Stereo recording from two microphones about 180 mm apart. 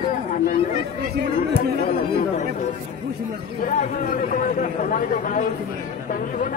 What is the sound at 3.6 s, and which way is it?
A man's voice, 45° left (ahead or behind).